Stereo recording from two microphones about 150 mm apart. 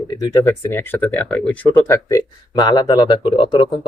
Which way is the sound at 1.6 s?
20° left (ahead or behind).